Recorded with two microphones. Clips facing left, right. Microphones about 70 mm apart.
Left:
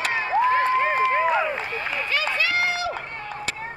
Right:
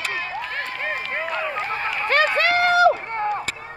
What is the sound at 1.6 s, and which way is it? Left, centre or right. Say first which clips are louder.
Run: right 4 dB; right.